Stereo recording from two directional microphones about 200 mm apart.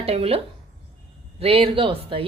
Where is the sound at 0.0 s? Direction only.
30° right (ahead or behind).